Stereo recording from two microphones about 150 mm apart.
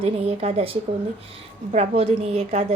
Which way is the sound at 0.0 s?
40° right (ahead or behind).